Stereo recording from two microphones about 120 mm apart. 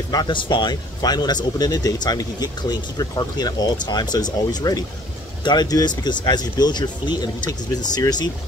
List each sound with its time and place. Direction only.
0.1 s speech: 40° left (ahead or behind)